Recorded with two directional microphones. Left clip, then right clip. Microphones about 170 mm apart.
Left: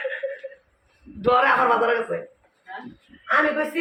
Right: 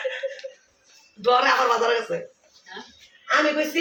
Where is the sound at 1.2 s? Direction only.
5° right (ahead or behind).